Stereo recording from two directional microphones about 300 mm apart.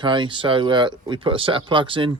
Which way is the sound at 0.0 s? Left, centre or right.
Centre.